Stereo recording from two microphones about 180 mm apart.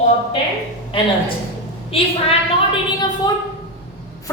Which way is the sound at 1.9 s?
30° left (ahead or behind).